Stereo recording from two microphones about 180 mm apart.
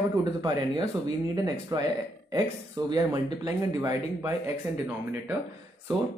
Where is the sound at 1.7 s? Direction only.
20° right (ahead or behind).